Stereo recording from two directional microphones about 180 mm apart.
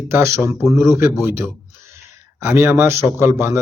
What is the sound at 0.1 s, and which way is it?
Speech, 15° right (ahead or behind).